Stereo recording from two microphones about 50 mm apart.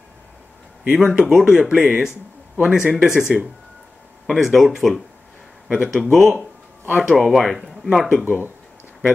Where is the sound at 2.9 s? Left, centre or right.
Centre.